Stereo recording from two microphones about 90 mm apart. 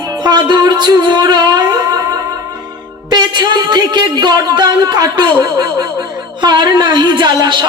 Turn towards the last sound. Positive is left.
turn(degrees=-55)  # may be behind; listen again after turning